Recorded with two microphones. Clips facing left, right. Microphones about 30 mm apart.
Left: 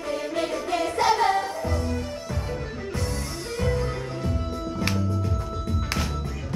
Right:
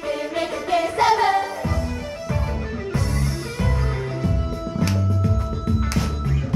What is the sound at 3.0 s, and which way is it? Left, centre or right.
Music, centre.